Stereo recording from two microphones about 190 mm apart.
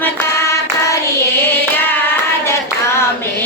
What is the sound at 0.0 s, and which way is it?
Hands, 10° left (ahead or behind).